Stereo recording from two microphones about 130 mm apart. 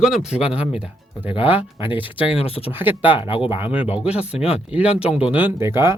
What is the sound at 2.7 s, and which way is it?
Speech, 15° right (ahead or behind).